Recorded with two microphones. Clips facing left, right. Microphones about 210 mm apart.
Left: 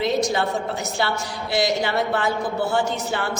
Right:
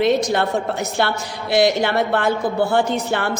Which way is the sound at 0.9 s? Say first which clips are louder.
Right 3 dB; 60° right (ahead or behind).